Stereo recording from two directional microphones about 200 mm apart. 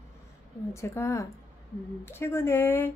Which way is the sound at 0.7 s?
15° left (ahead or behind).